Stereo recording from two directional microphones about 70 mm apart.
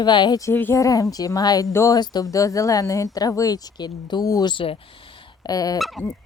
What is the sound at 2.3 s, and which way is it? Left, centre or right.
Speech, left.